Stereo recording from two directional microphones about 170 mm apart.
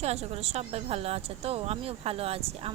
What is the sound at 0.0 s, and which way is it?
A woman's voice, 40° right (ahead or behind).